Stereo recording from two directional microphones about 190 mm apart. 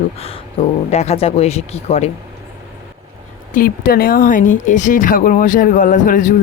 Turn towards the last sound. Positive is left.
turn(degrees=40)  # may be behind; listen again after turning